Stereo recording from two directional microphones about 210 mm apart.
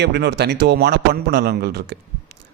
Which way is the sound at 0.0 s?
50° right (ahead or behind).